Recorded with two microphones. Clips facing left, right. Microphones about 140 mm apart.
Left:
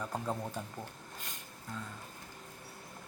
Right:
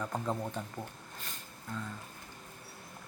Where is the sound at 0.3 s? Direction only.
5° left (ahead or behind).